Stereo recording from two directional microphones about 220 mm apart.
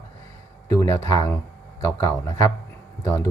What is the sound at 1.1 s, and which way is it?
Speech, 15° left (ahead or behind).